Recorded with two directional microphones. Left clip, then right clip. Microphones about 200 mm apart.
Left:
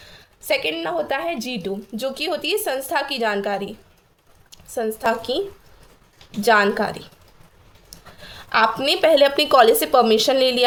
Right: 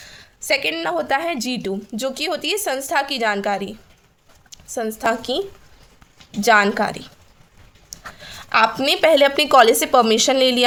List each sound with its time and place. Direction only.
0.0 s a woman's voice: 35° right (ahead or behind)
6.4 s a woman's voice: 25° right (ahead or behind)